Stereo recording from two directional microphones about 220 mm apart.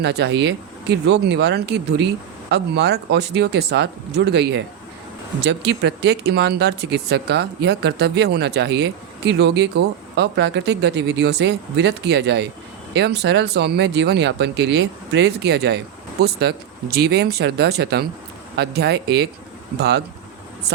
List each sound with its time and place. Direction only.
0.0 s speech: 50° right (ahead or behind)